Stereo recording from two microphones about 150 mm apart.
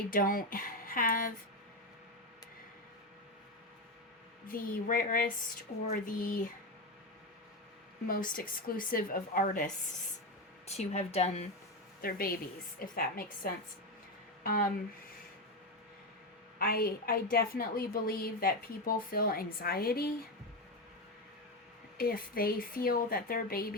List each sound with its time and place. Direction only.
0.1 s a woman's voice: 70° left (ahead or behind)
4.4 s a woman's voice: 70° left (ahead or behind)
8.0 s a woman's voice: 65° left (ahead or behind)
10.7 s speech: 45° left (ahead or behind)
12.0 s a woman's voice: 80° left
16.6 s a woman's voice: 85° left
21.9 s a woman's voice: 80° left